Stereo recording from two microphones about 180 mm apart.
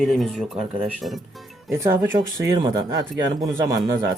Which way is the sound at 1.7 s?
15° right (ahead or behind).